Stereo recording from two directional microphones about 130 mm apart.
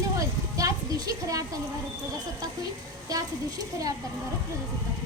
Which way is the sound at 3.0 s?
25° right (ahead or behind).